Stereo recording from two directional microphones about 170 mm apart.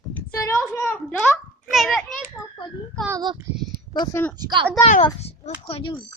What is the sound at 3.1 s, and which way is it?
Speech, 25° right (ahead or behind).